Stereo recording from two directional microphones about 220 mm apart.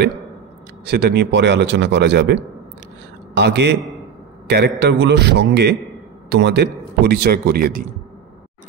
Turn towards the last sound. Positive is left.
turn(degrees=-45)  # may be behind; listen again after turning